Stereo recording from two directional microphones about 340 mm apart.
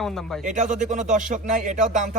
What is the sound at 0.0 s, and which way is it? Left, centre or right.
Speech, centre.